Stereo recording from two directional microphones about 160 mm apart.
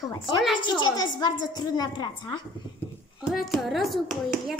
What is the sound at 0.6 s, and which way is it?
A woman's voice, 30° left (ahead or behind).